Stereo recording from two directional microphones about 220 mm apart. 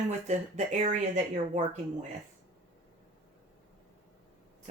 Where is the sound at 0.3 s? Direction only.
30° right (ahead or behind).